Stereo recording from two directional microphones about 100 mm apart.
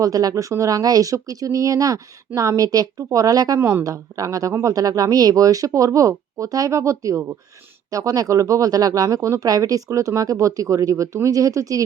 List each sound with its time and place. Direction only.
0.0 s speech: 40° right (ahead or behind)
3.6 s a woman's voice: 20° right (ahead or behind)
3.8 s speech: 35° right (ahead or behind)